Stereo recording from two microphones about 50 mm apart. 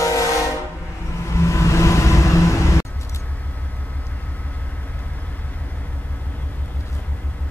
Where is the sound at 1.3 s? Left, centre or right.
Left.